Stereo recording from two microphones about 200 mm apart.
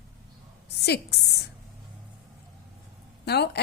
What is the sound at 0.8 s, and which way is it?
Speech, 55° left (ahead or behind).